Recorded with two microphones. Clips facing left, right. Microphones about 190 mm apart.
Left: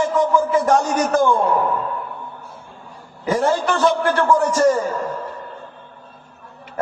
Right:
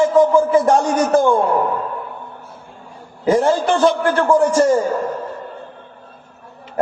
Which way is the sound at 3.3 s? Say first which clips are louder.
Right 4 dB; 30° right (ahead or behind).